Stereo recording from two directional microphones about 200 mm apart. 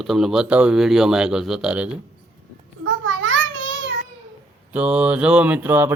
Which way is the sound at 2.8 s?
70° right (ahead or behind).